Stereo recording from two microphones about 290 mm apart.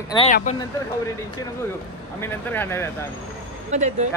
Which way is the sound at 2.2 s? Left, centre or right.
Centre.